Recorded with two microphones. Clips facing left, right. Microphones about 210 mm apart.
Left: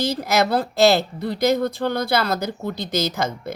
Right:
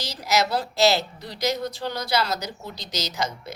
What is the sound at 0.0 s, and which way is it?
A woman's voice, 55° left (ahead or behind).